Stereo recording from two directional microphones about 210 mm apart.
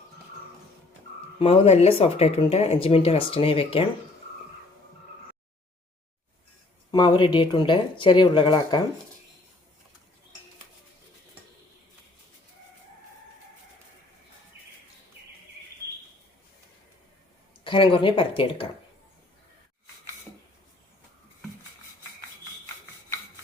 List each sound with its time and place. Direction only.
1.4 s speech: 30° left (ahead or behind)
6.9 s speech: 20° left (ahead or behind)
17.6 s speech: 25° left (ahead or behind)